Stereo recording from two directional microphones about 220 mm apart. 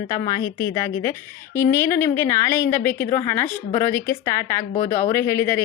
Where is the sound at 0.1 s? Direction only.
15° left (ahead or behind).